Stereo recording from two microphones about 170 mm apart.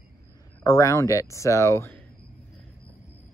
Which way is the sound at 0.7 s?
20° left (ahead or behind).